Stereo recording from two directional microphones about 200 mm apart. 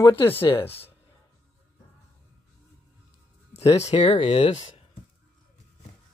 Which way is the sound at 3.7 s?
30° left (ahead or behind).